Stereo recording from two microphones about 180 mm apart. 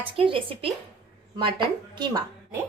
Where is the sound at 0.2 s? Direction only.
30° right (ahead or behind).